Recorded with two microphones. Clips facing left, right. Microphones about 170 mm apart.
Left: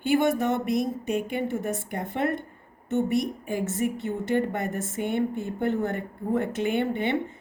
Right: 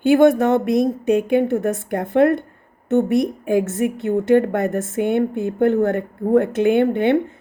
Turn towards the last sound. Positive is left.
turn(degrees=-60)  # may be behind; listen again after turning